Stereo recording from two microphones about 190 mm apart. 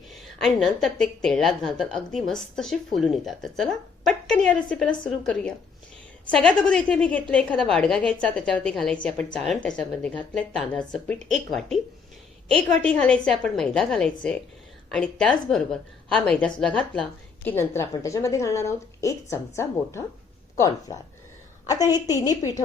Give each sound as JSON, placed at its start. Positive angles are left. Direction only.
{"t": 0.1, "sound": "a woman's voice", "side_deg": 0}
{"t": 22.2, "sound": "a woman's voice", "side_deg": 15}